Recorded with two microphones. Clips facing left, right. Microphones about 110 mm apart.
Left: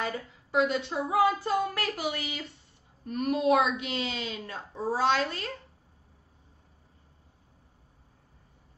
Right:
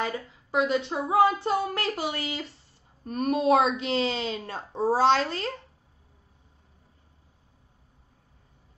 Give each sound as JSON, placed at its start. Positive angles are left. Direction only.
{"t": 0.0, "sound": "a woman's voice", "side_deg": -25}